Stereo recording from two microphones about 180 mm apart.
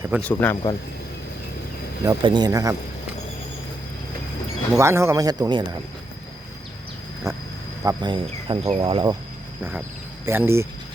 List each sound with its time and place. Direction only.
0.2 s speech: 10° left (ahead or behind)
0.5 s speech: 25° left (ahead or behind)
2.0 s speech: 25° right (ahead or behind)
4.8 s speech: 15° right (ahead or behind)
7.3 s speech: 15° right (ahead or behind)
10.2 s speech: 15° right (ahead or behind)